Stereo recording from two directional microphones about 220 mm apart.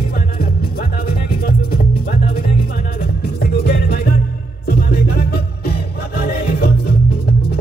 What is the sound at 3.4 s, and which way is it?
Music, 45° left (ahead or behind).